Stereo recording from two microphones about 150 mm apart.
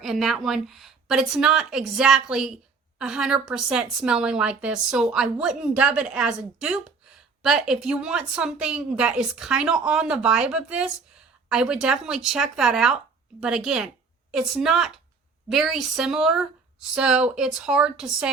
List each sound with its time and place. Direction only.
0.0 s a woman's voice: centre (ahead or behind)